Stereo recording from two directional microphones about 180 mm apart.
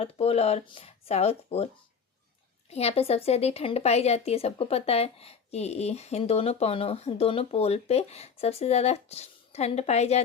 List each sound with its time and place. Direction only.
0.0 s speech: 35° left (ahead or behind)